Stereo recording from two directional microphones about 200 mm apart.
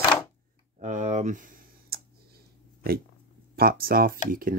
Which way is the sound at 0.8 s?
35° right (ahead or behind).